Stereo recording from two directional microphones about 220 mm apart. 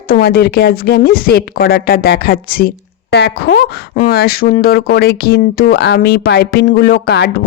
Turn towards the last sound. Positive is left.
turn(degrees=50)  # may be behind; listen again after turning